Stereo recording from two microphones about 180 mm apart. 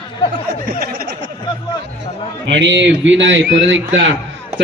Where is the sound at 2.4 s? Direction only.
75° right (ahead or behind).